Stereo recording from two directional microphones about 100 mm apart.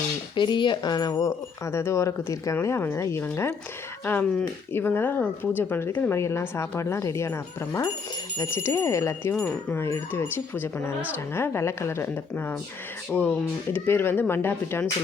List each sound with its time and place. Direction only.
0.3 s speech: 55° left (ahead or behind); by 3.2 s 30° left (ahead or behind)
4.0 s speech: 15° left (ahead or behind)
9.3 s speech: 15° left (ahead or behind)
13.7 s speech: 25° left (ahead or behind)